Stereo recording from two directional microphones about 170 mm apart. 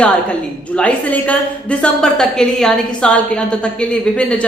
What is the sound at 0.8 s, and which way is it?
A woman's voice, 10° left (ahead or behind).